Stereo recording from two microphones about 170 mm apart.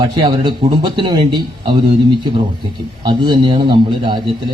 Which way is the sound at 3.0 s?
25° right (ahead or behind).